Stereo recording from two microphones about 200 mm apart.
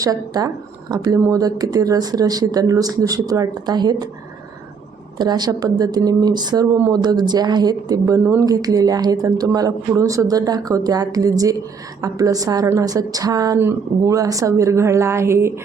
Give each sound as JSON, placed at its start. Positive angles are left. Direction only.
{"t": 0.0, "sound": "speech", "side_deg": -15}
{"t": 5.1, "sound": "a woman's voice", "side_deg": -20}